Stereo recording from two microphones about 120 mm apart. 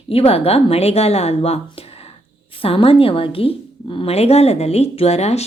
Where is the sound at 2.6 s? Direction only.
50° left (ahead or behind).